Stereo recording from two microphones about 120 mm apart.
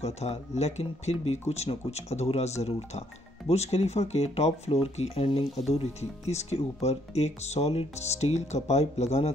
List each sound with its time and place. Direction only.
0.0 s speech: 65° left (ahead or behind)